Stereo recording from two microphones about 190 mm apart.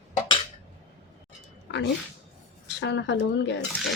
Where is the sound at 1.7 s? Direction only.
65° left (ahead or behind).